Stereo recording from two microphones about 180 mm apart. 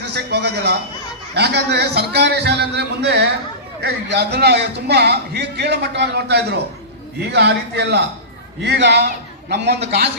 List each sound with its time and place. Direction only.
0.0 s a man's voice: 70° right (ahead or behind)